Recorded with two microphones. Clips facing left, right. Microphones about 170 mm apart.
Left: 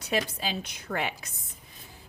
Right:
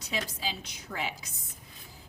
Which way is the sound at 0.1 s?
60° left (ahead or behind).